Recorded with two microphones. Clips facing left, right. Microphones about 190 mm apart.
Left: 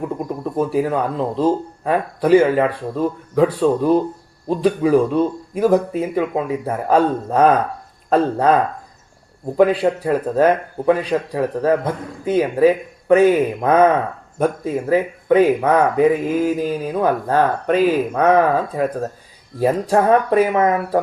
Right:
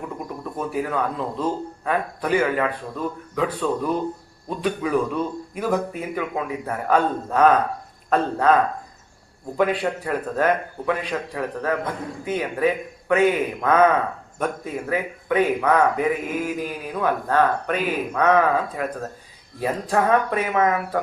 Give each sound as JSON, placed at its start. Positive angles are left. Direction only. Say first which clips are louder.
{"t": 0.5, "sound": "speech", "louder": "left 7 dB", "side_deg": 35}
{"t": 9.6, "sound": "speech", "louder": "left 7 dB", "side_deg": 35}